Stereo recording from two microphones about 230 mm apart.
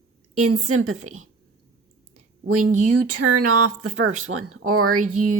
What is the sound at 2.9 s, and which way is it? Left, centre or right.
A woman's voice, right.